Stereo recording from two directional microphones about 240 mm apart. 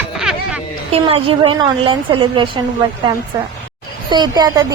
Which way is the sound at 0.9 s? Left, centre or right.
Right.